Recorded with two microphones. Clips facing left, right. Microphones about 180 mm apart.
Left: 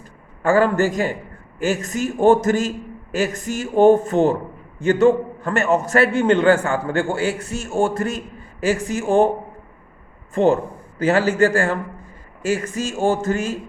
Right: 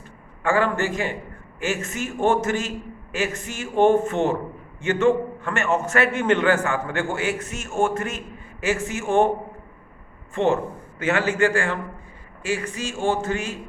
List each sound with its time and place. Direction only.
0.4 s a man's voice: 40° left (ahead or behind)
10.3 s a man's voice: 35° left (ahead or behind)